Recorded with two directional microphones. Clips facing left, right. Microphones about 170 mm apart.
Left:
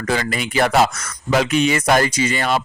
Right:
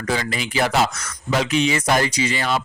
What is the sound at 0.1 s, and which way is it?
Speech, 55° left (ahead or behind).